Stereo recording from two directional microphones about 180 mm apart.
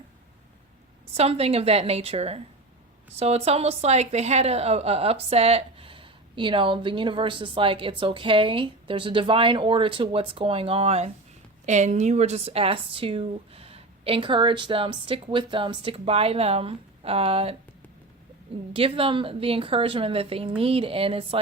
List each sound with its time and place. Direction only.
1.1 s a woman's voice: 35° right (ahead or behind)
18.7 s a woman's voice: 30° right (ahead or behind)